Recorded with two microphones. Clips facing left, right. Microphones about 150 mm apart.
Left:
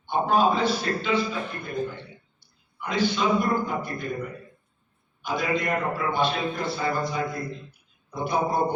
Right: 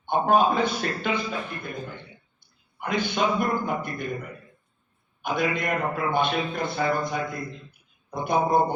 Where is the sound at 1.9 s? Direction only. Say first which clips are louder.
Left 1 dB; 50° right (ahead or behind).